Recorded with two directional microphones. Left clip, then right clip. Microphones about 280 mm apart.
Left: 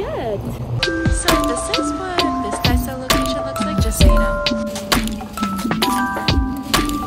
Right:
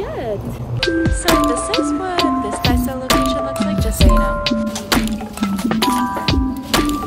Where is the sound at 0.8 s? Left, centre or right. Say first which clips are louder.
Right 2 dB; centre.